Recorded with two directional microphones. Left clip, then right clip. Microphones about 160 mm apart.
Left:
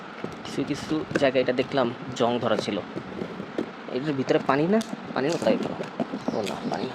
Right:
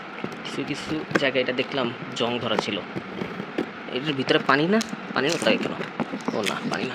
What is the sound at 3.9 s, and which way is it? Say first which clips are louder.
Speech: right 1 dB; 15° left (ahead or behind).